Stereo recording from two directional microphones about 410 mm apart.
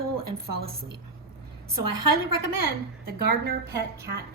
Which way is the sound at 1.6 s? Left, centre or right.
Right.